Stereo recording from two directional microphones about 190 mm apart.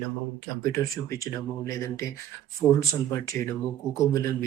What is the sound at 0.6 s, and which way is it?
Speech, 15° left (ahead or behind).